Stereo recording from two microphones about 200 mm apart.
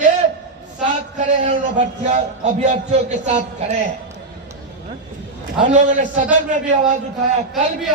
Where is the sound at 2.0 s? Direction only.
35° right (ahead or behind).